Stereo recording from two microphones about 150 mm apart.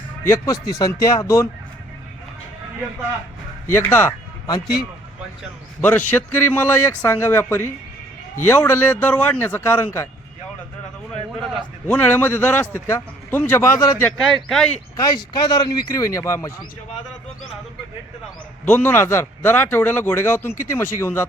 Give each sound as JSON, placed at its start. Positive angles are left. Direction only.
{"t": 0.3, "sound": "speech", "side_deg": 25}
{"t": 3.7, "sound": "speech", "side_deg": 15}
{"t": 5.8, "sound": "speech", "side_deg": 15}
{"t": 11.9, "sound": "speech", "side_deg": 10}
{"t": 14.0, "sound": "speech", "side_deg": 5}
{"t": 15.0, "sound": "speech", "side_deg": 25}
{"t": 18.6, "sound": "speech", "side_deg": 15}